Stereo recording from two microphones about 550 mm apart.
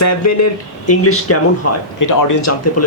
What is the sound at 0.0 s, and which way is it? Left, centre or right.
Speech, left.